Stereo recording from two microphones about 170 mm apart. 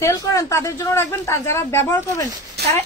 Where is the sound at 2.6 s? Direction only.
70° right (ahead or behind).